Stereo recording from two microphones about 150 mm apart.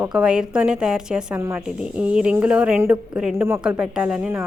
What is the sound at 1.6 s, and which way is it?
A woman's voice, 5° right (ahead or behind).